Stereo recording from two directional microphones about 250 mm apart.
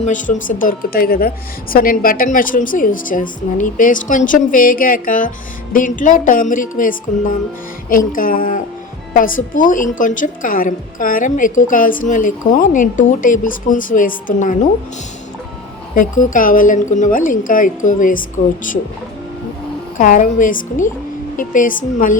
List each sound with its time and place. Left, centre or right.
0.0 s a woman's voice: left
16.0 s a woman's voice: left
20.0 s a woman's voice: left